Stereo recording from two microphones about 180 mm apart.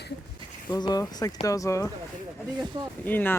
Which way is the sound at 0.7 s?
20° left (ahead or behind).